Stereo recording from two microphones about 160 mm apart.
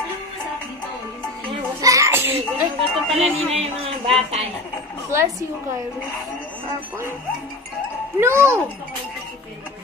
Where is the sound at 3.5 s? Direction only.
35° right (ahead or behind).